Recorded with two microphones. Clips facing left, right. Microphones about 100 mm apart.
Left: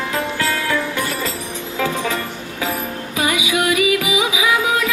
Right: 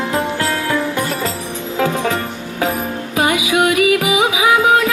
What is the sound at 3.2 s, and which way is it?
Music, 50° right (ahead or behind).